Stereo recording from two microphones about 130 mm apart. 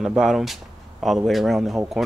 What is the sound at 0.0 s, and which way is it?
Speech, 5° right (ahead or behind).